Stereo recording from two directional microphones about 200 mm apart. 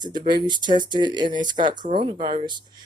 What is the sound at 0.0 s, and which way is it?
Speech, 20° right (ahead or behind).